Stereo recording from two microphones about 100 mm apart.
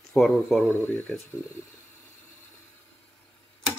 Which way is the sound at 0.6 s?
20° left (ahead or behind).